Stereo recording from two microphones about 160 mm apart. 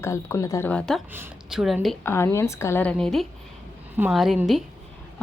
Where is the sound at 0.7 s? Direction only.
5° left (ahead or behind).